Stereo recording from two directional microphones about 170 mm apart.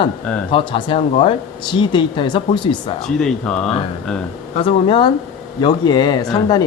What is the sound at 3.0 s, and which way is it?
Speech, centre (ahead or behind).